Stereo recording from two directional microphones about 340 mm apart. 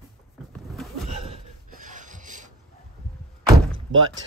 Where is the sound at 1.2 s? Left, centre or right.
Right.